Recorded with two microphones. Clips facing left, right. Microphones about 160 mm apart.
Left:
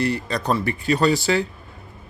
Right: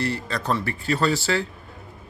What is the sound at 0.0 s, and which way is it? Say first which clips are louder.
Speech: left 4 dB; 15° left (ahead or behind).